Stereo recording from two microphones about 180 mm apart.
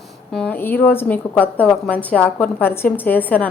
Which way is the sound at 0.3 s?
10° left (ahead or behind).